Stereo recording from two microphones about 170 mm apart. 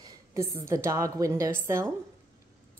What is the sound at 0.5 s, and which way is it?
Speech, 15° right (ahead or behind).